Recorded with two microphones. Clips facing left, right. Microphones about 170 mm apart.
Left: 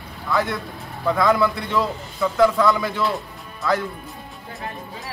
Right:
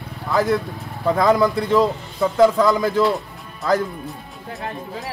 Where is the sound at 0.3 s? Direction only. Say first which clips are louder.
Right 4 dB; 40° right (ahead or behind).